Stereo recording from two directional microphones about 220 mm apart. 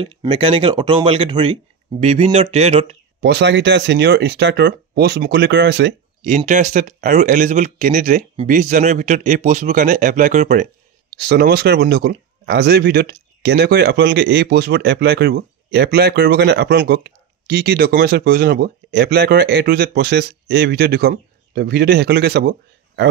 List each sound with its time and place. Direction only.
0.0 s speech: 25° right (ahead or behind)
3.2 s speech: 50° right (ahead or behind)
6.2 s speech: 35° right (ahead or behind)
11.1 s speech: 45° right (ahead or behind)